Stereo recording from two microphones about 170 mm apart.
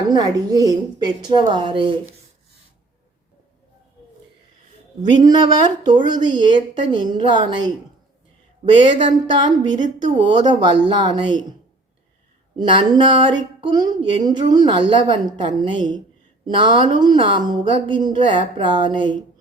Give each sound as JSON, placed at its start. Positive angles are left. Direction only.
{"t": 0.1, "sound": "a woman's voice", "side_deg": -25}
{"t": 5.0, "sound": "a woman's voice", "side_deg": -25}
{"t": 12.5, "sound": "a woman's voice", "side_deg": -30}